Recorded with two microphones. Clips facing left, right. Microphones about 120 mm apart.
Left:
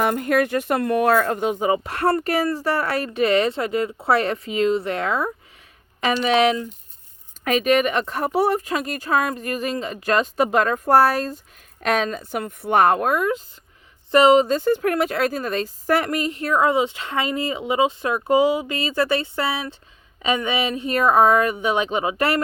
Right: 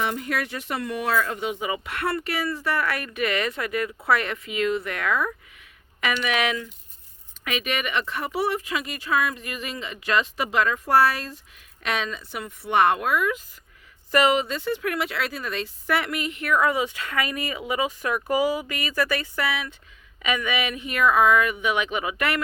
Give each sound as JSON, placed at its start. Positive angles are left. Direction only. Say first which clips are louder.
{"t": 0.0, "sound": "speech", "louder": "left 8 dB", "side_deg": 50}
{"t": 14.1, "sound": "speech", "louder": "left 7 dB", "side_deg": 25}